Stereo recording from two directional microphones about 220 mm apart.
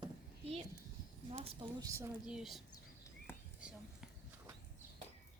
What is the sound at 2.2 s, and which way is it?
Speech, centre (ahead or behind).